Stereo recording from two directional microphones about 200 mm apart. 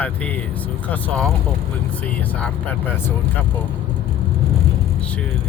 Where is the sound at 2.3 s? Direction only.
5° left (ahead or behind).